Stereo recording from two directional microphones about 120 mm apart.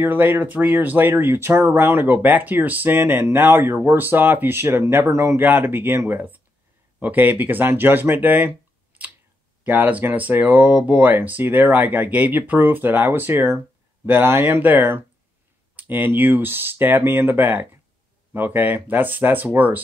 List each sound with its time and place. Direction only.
0.0 s speech: 15° right (ahead or behind)